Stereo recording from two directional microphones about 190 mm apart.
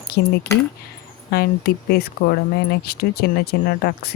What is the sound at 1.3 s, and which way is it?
Speech, 55° left (ahead or behind).